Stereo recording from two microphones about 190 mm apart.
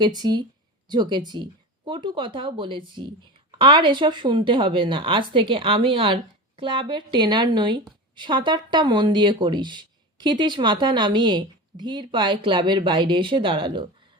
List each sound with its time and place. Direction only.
0.0 s speech: 20° right (ahead or behind)